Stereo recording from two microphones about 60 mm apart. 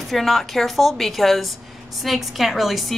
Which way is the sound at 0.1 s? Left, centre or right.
Centre.